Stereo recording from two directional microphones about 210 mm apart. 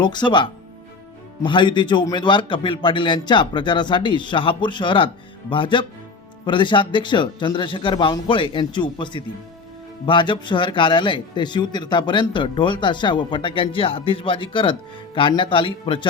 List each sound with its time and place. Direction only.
0.0 s a man's voice: 20° left (ahead or behind)